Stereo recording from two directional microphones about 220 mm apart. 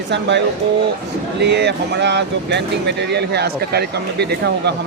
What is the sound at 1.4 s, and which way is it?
Speech, 50° right (ahead or behind).